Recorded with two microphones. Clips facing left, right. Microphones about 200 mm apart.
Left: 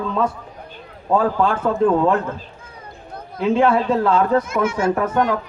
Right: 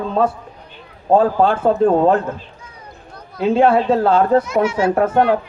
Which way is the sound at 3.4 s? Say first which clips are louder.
Right 3 dB; 30° right (ahead or behind).